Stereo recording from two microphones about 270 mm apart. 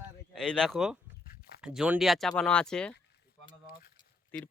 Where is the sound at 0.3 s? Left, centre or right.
Centre.